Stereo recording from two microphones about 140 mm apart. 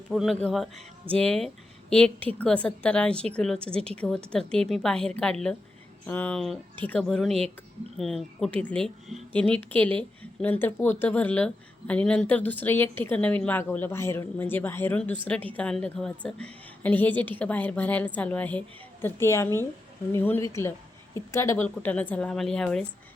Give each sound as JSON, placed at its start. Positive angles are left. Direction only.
{"t": 0.1, "sound": "a woman's voice", "side_deg": 0}